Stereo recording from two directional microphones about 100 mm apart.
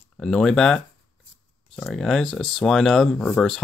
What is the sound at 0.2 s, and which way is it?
Speech, 5° left (ahead or behind).